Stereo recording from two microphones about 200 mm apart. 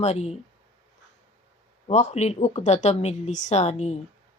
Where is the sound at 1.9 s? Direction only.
35° left (ahead or behind).